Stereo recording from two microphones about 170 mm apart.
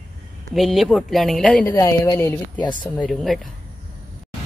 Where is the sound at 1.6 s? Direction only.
15° left (ahead or behind).